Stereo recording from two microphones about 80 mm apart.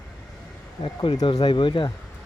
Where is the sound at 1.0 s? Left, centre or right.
Left.